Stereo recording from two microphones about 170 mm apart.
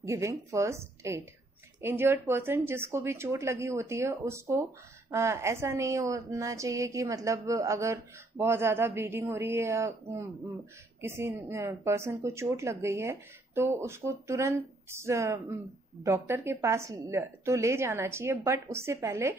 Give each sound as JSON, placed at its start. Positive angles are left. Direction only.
{"t": 0.0, "sound": "speech", "side_deg": -15}